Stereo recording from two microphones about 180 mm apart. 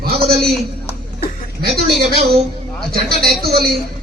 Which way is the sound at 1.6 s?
60° right (ahead or behind).